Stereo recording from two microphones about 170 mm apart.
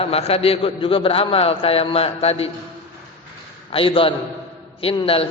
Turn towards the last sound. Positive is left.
turn(degrees=35)  # may be behind; listen again after turning